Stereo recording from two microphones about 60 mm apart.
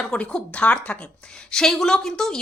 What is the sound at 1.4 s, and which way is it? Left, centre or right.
Speech, centre.